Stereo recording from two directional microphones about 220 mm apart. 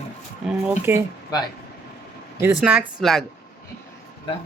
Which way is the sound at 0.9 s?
10° right (ahead or behind).